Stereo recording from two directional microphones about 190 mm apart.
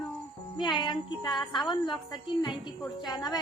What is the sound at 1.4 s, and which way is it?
Speech, centre (ahead or behind).